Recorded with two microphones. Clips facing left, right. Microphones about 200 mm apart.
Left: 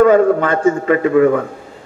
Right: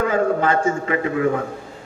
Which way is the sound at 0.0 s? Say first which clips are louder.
Left 8 dB; 55° left (ahead or behind).